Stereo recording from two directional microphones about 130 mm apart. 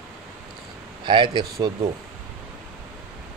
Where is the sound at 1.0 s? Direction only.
40° right (ahead or behind).